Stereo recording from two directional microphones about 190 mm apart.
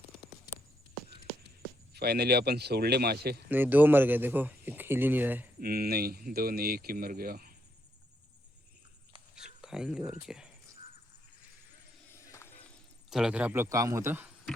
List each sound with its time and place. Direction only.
1.9 s speech: 60° right (ahead or behind)
3.5 s speech: 10° right (ahead or behind)
5.5 s speech: 50° right (ahead or behind)
9.3 s a sound: 5° right (ahead or behind)
10.1 s speech: 5° right (ahead or behind)
12.1 s a sound: 15° left (ahead or behind)
13.1 s speech: 5° right (ahead or behind)